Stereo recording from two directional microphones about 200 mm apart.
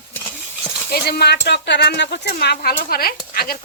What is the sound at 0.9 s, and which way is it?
Speech, 55° left (ahead or behind).